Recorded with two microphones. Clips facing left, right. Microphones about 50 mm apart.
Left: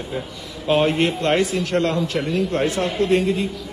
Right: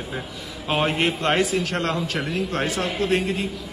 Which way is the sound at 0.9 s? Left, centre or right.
Right.